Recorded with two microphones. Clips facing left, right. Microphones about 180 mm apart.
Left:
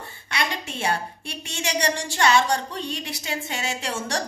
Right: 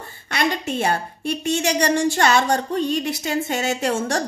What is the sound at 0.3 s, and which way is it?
A woman's voice, 45° right (ahead or behind).